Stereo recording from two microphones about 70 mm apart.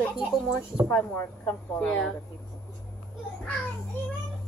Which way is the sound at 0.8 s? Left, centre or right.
Left.